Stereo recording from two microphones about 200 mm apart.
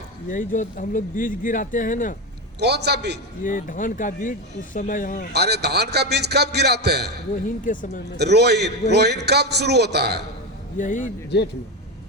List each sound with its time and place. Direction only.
0.3 s speech: 40° left (ahead or behind)
2.6 s a man's voice: 55° right (ahead or behind)
3.4 s speech: 40° left (ahead or behind)
5.3 s a man's voice: 55° right (ahead or behind)
7.4 s speech: 40° left (ahead or behind)
8.2 s a man's voice: 55° right (ahead or behind)
10.8 s speech: 40° left (ahead or behind)